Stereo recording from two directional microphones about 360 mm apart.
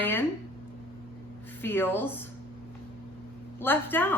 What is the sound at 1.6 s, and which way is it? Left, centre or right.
Speech, centre.